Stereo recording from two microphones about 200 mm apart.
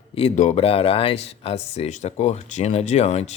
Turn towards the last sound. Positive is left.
turn(degrees=30)  # may be behind; listen again after turning